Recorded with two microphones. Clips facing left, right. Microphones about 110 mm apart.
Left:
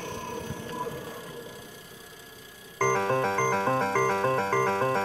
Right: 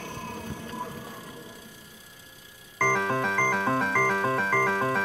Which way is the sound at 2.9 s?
30° left (ahead or behind).